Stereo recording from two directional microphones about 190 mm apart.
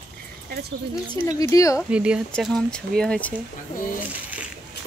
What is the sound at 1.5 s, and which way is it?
Speech, 15° left (ahead or behind).